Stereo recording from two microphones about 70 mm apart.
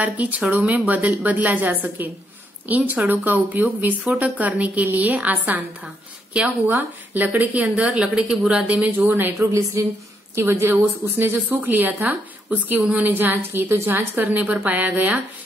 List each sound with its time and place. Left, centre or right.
0.0 s a woman's voice: centre
6.7 s a woman's voice: right
9.0 s speech: right
9.8 s a woman's voice: right